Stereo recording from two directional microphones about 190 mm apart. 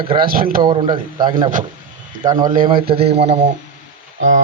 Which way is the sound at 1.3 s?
20° right (ahead or behind).